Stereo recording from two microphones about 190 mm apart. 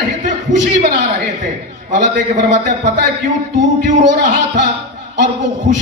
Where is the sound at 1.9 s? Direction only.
40° right (ahead or behind).